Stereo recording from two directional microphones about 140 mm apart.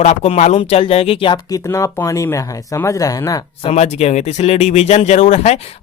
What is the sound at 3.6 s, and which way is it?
Speech, 50° left (ahead or behind).